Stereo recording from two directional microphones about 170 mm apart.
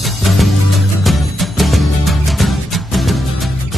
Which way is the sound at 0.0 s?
Centre (ahead or behind).